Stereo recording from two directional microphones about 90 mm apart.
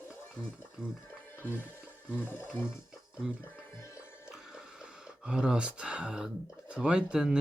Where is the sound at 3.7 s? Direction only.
30° left (ahead or behind).